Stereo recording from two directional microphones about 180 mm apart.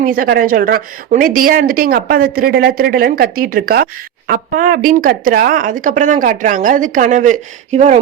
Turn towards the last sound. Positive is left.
turn(degrees=-40)  # may be behind; listen again after turning